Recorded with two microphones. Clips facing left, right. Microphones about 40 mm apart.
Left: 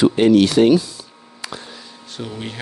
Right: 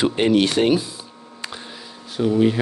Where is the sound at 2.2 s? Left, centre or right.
Centre.